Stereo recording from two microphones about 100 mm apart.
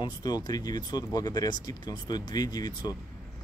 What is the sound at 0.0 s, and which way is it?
Speech, 45° left (ahead or behind).